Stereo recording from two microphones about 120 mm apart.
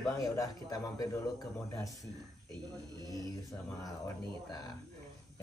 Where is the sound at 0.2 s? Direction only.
30° left (ahead or behind).